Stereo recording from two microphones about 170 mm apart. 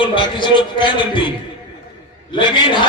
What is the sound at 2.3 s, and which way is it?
Speech, 30° left (ahead or behind).